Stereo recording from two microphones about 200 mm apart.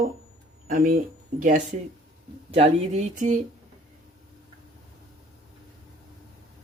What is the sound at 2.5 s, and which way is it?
Speech, 35° right (ahead or behind).